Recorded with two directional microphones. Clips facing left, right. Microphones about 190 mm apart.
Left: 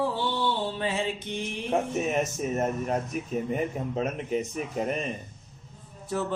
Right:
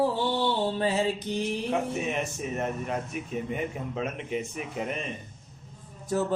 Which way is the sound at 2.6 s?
40° left (ahead or behind).